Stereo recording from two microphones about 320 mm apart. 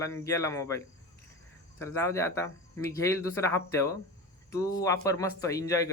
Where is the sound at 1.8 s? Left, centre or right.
Centre.